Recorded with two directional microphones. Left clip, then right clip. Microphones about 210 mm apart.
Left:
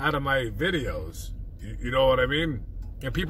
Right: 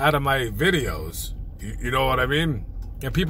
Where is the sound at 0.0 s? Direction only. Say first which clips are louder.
Right 4 dB; 20° right (ahead or behind).